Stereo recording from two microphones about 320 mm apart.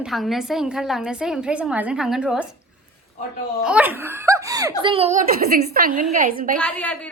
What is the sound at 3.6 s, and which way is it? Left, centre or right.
A woman's voice, centre.